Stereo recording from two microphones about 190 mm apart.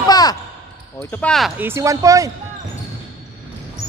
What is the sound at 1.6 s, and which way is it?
Speech, 15° right (ahead or behind).